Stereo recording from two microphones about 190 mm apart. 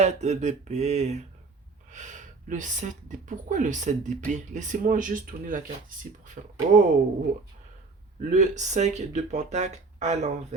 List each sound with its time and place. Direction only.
0.0 s speech: 35° right (ahead or behind)
8.3 s speech: 40° right (ahead or behind)